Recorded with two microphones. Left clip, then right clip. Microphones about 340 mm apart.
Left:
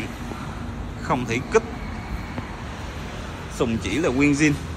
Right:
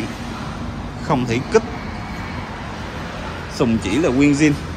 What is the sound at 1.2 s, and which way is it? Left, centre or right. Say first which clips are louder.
Speech: right 4 dB; centre.